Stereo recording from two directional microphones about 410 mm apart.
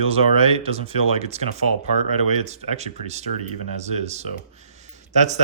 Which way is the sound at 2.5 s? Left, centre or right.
Centre.